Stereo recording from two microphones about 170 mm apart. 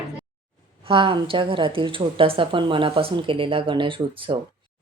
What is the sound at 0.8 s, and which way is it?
A woman's voice, 30° right (ahead or behind).